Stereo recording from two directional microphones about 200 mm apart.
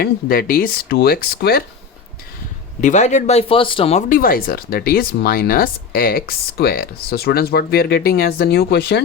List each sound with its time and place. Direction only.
0.0 s speech: 50° left (ahead or behind)
2.8 s speech: 35° left (ahead or behind)
4.1 s speech: 45° left (ahead or behind)